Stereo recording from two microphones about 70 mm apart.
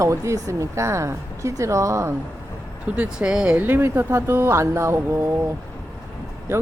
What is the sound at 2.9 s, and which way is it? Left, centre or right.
Speech, centre.